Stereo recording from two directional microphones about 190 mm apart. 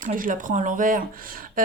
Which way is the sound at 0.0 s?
45° right (ahead or behind).